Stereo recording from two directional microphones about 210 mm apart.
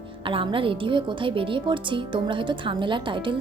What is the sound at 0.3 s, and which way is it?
A woman's voice, 25° right (ahead or behind).